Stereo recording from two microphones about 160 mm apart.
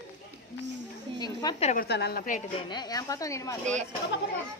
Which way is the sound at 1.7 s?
85° left.